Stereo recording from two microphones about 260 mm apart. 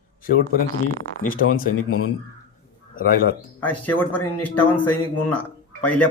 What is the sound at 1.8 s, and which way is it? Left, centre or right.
Speech, left.